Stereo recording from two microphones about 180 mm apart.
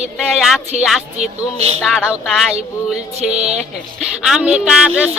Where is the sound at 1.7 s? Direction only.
5° left (ahead or behind).